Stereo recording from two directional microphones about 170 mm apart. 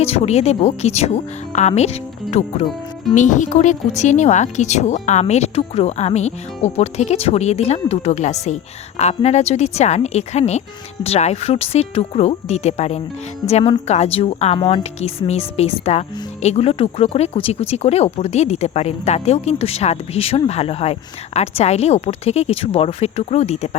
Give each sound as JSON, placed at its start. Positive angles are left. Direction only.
{"t": 0.0, "sound": "a woman's voice", "side_deg": 40}